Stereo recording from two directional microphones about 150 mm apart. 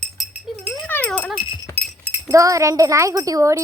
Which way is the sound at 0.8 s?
10° left (ahead or behind).